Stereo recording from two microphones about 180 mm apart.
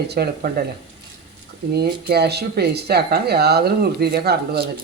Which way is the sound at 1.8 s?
60° right (ahead or behind).